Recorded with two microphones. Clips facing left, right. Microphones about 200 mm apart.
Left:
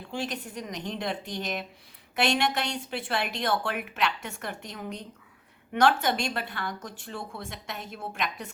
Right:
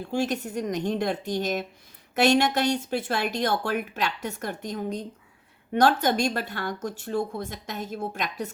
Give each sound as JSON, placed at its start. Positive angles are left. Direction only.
{"t": 0.0, "sound": "a woman's voice", "side_deg": -45}